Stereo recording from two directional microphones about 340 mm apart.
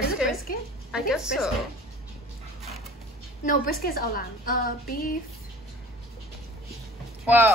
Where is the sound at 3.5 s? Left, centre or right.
Left.